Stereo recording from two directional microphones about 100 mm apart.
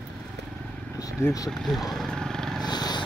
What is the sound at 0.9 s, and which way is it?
Speech, 35° left (ahead or behind).